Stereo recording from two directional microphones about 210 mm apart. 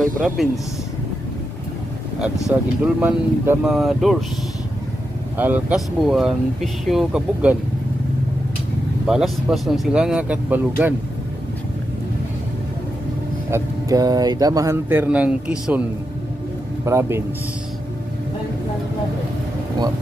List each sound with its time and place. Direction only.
0.4 s speech: centre (ahead or behind)
2.5 s speech: 5° right (ahead or behind)
5.4 s speech: 5° right (ahead or behind)
9.0 s speech: centre (ahead or behind)
13.5 s speech: 15° right (ahead or behind)
16.8 s speech: 15° right (ahead or behind)